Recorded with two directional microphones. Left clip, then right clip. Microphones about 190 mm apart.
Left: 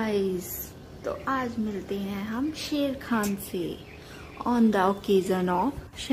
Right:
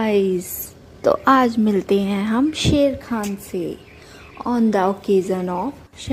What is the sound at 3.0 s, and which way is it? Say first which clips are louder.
A woman's voice: right 3 dB; 10° right (ahead or behind).